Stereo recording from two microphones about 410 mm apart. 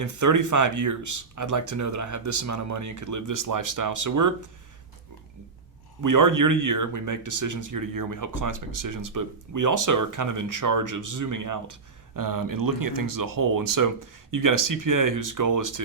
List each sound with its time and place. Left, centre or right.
0.0 s speech: right
6.0 s speech: right